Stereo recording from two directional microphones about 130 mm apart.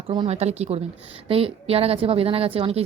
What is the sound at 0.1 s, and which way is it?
A woman's voice, 50° right (ahead or behind).